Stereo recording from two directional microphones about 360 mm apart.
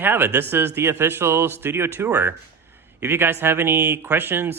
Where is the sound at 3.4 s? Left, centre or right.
Centre.